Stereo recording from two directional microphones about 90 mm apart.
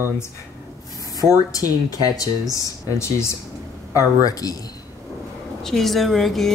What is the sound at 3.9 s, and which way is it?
Speech, 45° left (ahead or behind).